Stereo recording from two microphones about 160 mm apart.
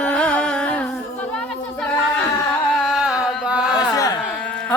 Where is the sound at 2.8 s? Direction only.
Centre (ahead or behind).